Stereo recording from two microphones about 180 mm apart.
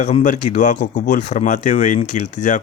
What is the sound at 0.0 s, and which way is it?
Speech, 40° left (ahead or behind).